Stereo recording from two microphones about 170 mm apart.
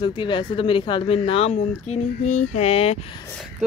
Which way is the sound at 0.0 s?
30° left (ahead or behind).